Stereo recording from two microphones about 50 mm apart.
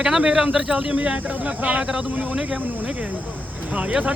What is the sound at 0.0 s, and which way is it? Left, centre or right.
Speech, centre.